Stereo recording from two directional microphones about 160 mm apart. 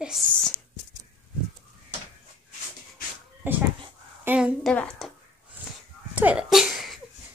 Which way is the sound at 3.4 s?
10° right (ahead or behind).